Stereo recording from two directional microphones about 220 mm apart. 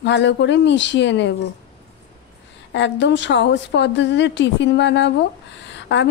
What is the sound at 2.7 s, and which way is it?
A woman's voice, 55° left (ahead or behind).